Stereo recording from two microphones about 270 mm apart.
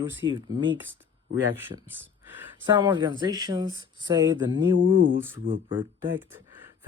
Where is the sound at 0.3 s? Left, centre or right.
Centre.